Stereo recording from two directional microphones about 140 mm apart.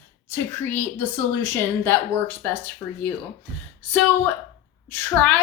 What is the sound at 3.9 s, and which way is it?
Speech, 10° left (ahead or behind).